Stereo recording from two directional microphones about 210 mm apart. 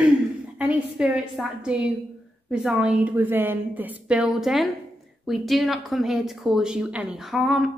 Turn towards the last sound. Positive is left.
turn(degrees=0)  # may be behind; listen again after turning